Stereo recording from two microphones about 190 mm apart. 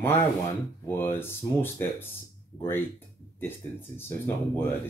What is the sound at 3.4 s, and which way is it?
Speech, 10° left (ahead or behind).